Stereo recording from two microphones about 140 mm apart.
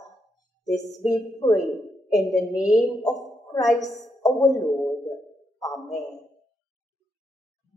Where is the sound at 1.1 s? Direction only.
25° left (ahead or behind).